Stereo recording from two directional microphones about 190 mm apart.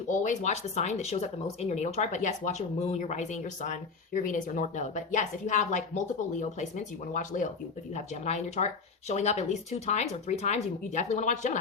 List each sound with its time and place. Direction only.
0.1 s speech: 40° left (ahead or behind)